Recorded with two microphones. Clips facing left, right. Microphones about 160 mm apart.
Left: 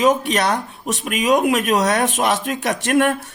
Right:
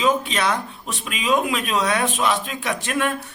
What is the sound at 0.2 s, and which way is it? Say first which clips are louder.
Speech: left 3 dB; 65° left (ahead or behind).